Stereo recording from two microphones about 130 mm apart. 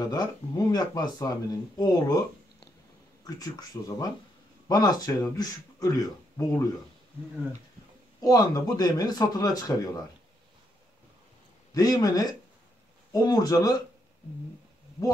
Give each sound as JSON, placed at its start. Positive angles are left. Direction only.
{"t": 0.1, "sound": "speech", "side_deg": 30}
{"t": 8.2, "sound": "speech", "side_deg": 30}
{"t": 11.7, "sound": "speech", "side_deg": 30}